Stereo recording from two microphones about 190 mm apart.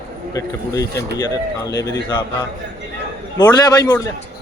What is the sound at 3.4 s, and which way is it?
Speech, 20° left (ahead or behind).